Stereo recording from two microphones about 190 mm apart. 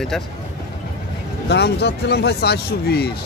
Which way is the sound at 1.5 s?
60° left (ahead or behind).